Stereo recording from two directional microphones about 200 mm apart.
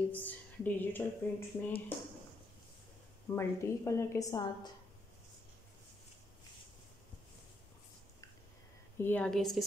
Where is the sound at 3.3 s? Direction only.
15° left (ahead or behind).